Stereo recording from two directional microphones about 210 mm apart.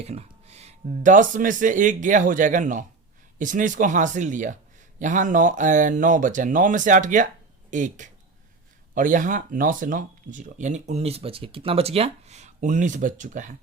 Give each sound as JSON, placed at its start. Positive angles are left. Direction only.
{"t": 0.0, "sound": "speech", "side_deg": -30}